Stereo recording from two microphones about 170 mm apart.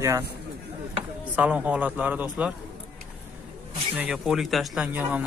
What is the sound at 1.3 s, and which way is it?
Speech, 10° right (ahead or behind).